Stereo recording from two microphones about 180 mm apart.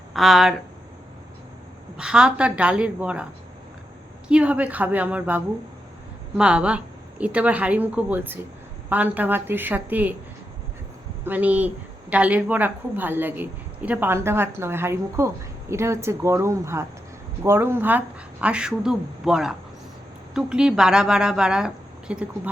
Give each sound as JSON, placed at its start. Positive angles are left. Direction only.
{"t": 0.1, "sound": "speech", "side_deg": 0}
{"t": 2.0, "sound": "a woman's voice", "side_deg": -5}
{"t": 4.3, "sound": "a woman's voice", "side_deg": -5}
{"t": 11.3, "sound": "a woman's voice", "side_deg": -10}